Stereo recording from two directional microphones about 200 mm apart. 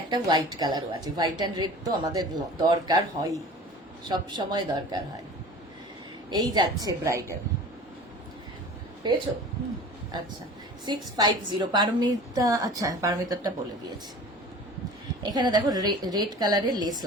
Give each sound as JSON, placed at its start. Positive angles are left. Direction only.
{"t": 0.1, "sound": "a woman's voice", "side_deg": -20}
{"t": 6.3, "sound": "a woman's voice", "side_deg": -20}
{"t": 9.0, "sound": "a woman's voice", "side_deg": -20}
{"t": 10.8, "sound": "a woman's voice", "side_deg": -20}
{"t": 15.2, "sound": "a woman's voice", "side_deg": -20}